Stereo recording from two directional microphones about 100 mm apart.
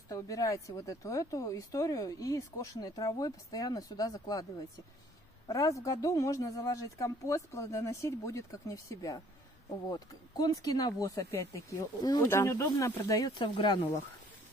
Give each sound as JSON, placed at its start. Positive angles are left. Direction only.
{"t": 0.1, "sound": "speech", "side_deg": 35}
{"t": 5.5, "sound": "speech", "side_deg": 35}
{"t": 13.4, "sound": "speech", "side_deg": 55}